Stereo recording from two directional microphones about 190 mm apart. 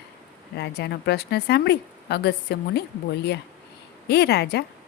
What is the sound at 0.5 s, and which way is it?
A woman's voice, 60° left (ahead or behind).